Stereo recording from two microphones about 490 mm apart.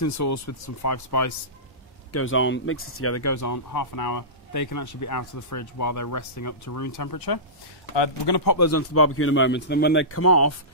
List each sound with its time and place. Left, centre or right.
0.0 s speech: left
2.1 s speech: left
7.9 s speech: left
8.5 s speech: left